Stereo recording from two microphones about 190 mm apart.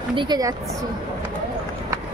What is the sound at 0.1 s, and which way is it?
Speech, 25° right (ahead or behind).